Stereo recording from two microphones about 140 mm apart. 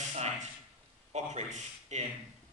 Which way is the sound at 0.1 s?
50° right (ahead or behind).